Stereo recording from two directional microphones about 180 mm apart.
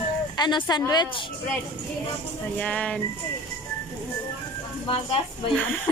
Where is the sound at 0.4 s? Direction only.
25° left (ahead or behind).